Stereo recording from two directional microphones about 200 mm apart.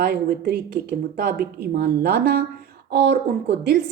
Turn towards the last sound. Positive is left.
turn(degrees=-55)  # may be behind; listen again after turning